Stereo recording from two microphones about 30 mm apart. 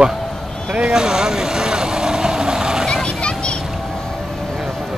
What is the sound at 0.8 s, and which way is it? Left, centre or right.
Vehicle, right.